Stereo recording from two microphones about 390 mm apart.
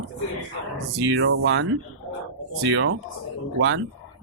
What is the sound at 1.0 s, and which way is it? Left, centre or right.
Speech, right.